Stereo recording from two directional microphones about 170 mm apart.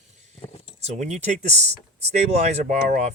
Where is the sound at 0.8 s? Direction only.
45° right (ahead or behind).